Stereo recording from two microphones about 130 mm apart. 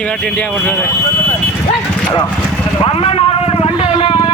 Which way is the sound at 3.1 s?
45° left (ahead or behind).